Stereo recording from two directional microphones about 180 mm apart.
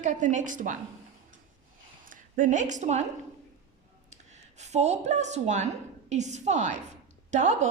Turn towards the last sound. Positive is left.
turn(degrees=-40)  # may be behind; listen again after turning